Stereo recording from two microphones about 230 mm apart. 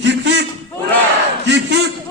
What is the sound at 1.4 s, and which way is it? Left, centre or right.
Speech, right.